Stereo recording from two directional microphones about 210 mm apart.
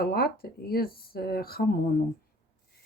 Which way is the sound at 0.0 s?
45° left (ahead or behind).